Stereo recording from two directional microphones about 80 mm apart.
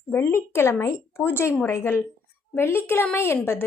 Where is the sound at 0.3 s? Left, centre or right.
Left.